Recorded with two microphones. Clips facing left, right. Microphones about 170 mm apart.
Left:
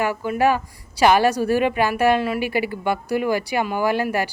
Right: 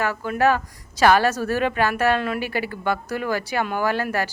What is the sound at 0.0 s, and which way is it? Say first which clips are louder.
A woman's voice: left 1 dB; 15° left (ahead or behind).